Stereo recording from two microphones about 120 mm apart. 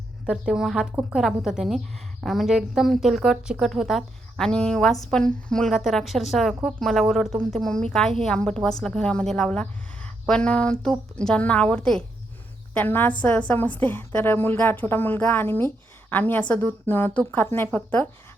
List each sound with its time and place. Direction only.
0.3 s a woman's voice: 5° right (ahead or behind); by 18.1 s 15° left (ahead or behind)